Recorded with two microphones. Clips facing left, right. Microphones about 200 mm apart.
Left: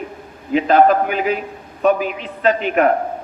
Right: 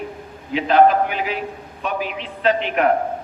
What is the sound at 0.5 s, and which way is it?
A man's voice, 45° left (ahead or behind).